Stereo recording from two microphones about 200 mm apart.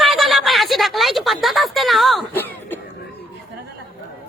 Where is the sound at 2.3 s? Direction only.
10° left (ahead or behind).